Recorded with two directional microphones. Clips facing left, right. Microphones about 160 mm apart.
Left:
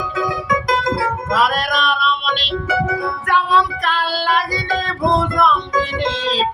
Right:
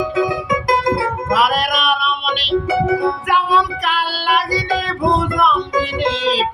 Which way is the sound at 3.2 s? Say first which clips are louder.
Even; 10° right (ahead or behind).